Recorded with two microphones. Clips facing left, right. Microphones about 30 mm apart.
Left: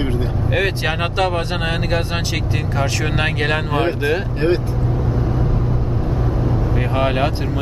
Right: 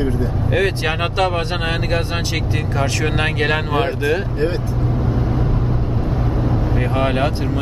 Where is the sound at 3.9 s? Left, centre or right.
Centre.